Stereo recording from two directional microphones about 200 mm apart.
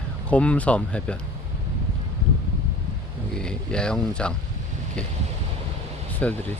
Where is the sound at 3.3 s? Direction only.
5° left (ahead or behind).